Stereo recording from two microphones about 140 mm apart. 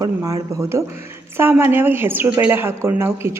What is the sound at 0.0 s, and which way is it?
A woman's voice, 25° right (ahead or behind).